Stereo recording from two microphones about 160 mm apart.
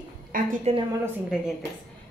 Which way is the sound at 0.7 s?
40° right (ahead or behind).